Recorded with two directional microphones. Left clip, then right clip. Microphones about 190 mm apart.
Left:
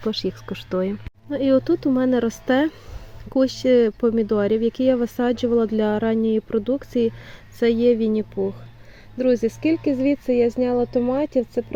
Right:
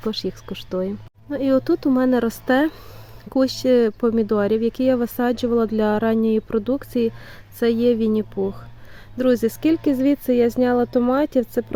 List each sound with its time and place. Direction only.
0.0 s speech: centre (ahead or behind); by 11.6 s 20° right (ahead or behind)